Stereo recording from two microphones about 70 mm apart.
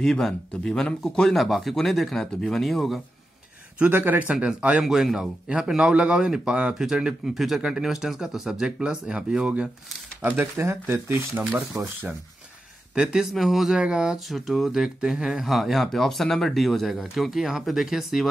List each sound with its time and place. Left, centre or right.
0.0 s a man's voice: centre
1.4 s speech: centre
3.8 s speech: right
4.3 s speech: centre
10.4 s speech: right
12.9 s speech: centre
14.3 s speech: centre